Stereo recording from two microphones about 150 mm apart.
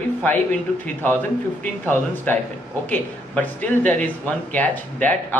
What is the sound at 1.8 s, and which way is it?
A man's voice, 10° left (ahead or behind).